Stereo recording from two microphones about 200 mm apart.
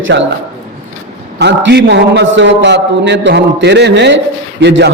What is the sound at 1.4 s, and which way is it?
A man's voice, 60° right (ahead or behind).